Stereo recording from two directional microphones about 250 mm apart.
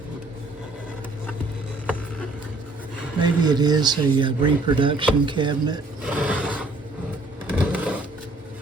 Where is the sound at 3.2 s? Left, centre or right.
Centre.